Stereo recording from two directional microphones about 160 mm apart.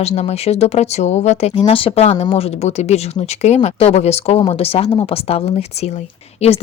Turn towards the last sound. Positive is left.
turn(degrees=40)  # may be behind; listen again after turning